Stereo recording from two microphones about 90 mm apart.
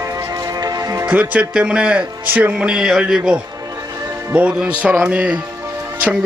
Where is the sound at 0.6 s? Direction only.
40° right (ahead or behind).